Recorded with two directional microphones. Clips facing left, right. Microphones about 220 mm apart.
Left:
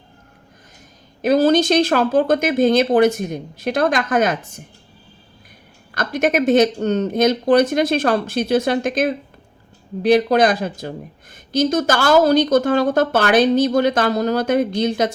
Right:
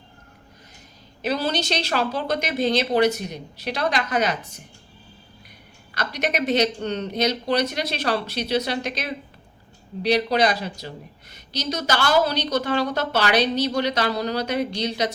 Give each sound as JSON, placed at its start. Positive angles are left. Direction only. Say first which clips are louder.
{"t": 1.2, "sound": "speech", "louder": "left 10 dB", "side_deg": 50}
{"t": 5.9, "sound": "speech", "louder": "left 7 dB", "side_deg": 50}